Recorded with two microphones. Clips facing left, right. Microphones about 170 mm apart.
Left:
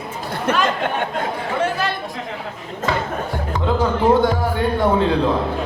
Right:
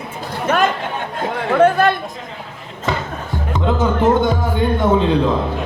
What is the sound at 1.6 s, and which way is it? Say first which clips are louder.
Chatter: right 10 dB; 55° right (ahead or behind).